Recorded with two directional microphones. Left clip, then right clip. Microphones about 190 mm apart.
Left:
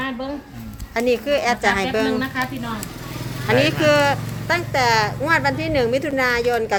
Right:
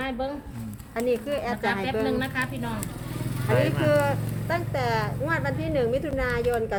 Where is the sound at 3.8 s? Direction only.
45° left (ahead or behind).